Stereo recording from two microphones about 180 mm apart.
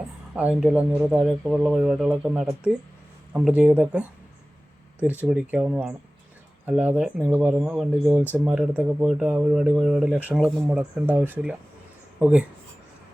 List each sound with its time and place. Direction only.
0.3 s speech: 5° right (ahead or behind)
5.0 s speech: 10° right (ahead or behind)